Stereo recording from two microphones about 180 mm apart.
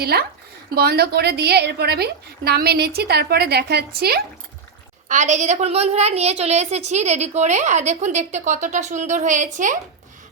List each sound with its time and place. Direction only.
0.0 s a woman's voice: 60° right (ahead or behind)
5.0 s a woman's voice: 40° right (ahead or behind)